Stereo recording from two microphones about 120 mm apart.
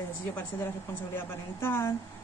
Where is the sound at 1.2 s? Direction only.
20° left (ahead or behind).